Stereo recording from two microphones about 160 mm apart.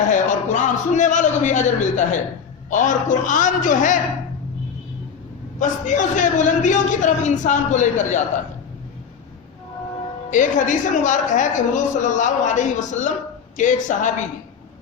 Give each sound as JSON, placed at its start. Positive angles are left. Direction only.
{"t": 0.1, "sound": "a man's voice", "side_deg": 50}
{"t": 5.5, "sound": "a woman's voice", "side_deg": 50}
{"t": 10.2, "sound": "a woman's voice", "side_deg": 50}